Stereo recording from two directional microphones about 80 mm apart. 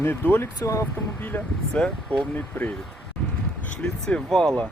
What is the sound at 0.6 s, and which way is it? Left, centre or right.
Speech, left.